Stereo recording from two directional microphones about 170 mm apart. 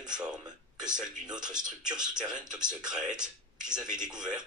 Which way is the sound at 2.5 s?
5° right (ahead or behind).